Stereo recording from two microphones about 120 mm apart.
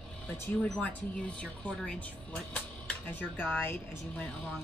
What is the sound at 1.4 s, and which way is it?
A woman's voice, 10° left (ahead or behind).